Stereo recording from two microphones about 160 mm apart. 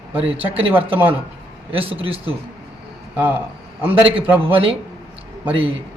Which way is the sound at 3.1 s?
10° right (ahead or behind).